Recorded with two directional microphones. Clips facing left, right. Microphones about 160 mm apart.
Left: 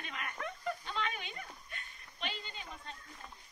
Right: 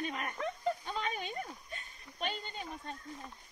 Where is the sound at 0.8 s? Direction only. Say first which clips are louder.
Right 2 dB; 45° right (ahead or behind).